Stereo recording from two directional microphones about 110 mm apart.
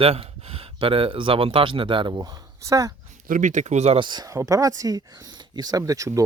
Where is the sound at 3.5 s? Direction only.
90° right.